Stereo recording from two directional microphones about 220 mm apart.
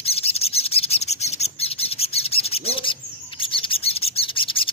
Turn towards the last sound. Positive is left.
turn(degrees=25)  # may be behind; listen again after turning